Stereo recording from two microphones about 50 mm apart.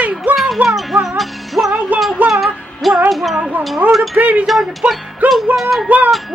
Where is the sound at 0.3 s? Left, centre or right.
Right.